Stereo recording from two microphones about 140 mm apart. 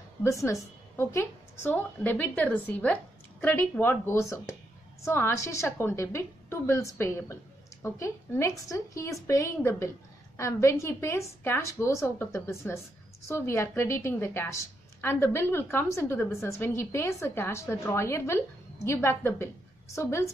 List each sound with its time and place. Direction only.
0.2 s a woman's voice: 20° left (ahead or behind)